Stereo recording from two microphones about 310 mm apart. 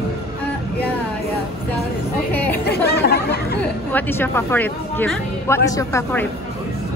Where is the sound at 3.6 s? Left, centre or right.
Centre.